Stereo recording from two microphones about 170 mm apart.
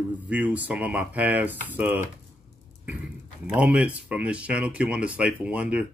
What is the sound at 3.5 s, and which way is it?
Speech, 10° right (ahead or behind).